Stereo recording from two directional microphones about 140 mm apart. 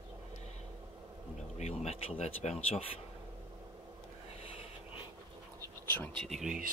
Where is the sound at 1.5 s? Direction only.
50° left (ahead or behind).